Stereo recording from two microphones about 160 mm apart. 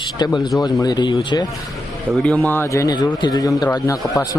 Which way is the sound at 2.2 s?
10° left (ahead or behind).